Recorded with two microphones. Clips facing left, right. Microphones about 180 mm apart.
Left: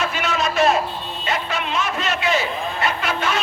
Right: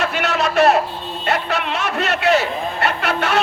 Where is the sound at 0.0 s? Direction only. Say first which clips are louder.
Right 3 dB; 65° right (ahead or behind).